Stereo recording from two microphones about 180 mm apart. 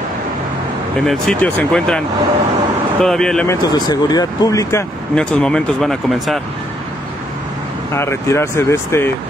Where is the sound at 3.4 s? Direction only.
20° left (ahead or behind).